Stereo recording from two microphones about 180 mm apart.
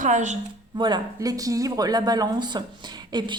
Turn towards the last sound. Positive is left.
turn(degrees=-25)  # may be behind; listen again after turning